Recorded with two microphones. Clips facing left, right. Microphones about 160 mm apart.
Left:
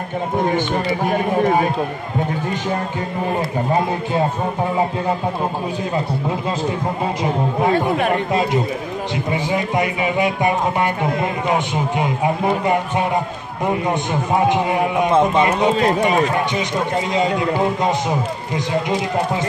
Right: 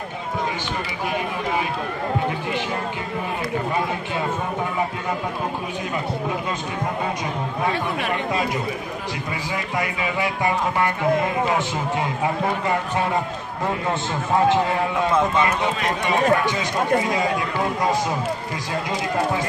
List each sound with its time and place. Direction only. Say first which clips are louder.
0.4 s speech: left 8 dB; 50° left (ahead or behind)
3.7 s a man's voice: left 6 dB; 35° left (ahead or behind)
7.7 s speech: left 7 dB; 45° left (ahead or behind)
9.1 s a man's voice: left 10 dB; 25° left (ahead or behind)